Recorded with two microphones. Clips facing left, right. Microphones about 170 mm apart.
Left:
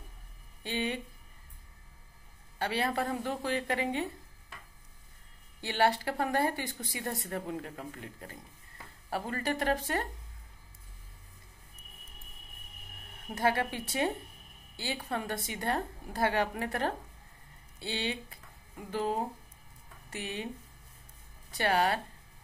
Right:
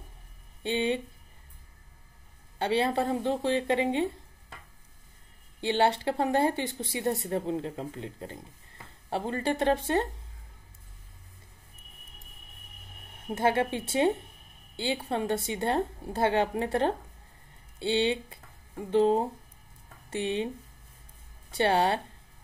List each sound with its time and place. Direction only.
0.7 s speech: 25° right (ahead or behind)
2.6 s speech: 25° right (ahead or behind)
5.6 s speech: 25° right (ahead or behind)
13.3 s speech: 25° right (ahead or behind)
21.5 s speech: 25° right (ahead or behind)